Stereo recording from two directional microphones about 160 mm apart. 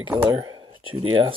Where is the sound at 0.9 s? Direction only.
35° right (ahead or behind).